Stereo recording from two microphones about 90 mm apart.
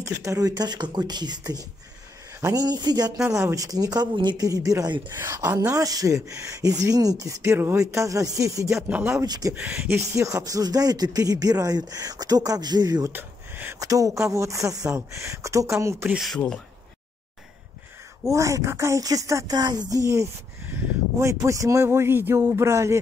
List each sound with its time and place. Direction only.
0.0 s speech: 35° right (ahead or behind)
3.3 s speech: 25° right (ahead or behind)
3.5 s speech: 40° right (ahead or behind)
4.5 s speech: 40° right (ahead or behind)
8.8 s speech: 15° right (ahead or behind)
9.2 s speech: 45° right (ahead or behind)
9.6 s speech: 5° right (ahead or behind)
9.8 s speech: 35° right (ahead or behind)
13.1 s a sound: 25° right (ahead or behind)
13.7 s speech: 40° right (ahead or behind)
16.2 s speech: 5° left (ahead or behind)
18.3 s speech: 35° right (ahead or behind)
20.6 s a sound: 20° right (ahead or behind)
21.2 s speech: 35° right (ahead or behind)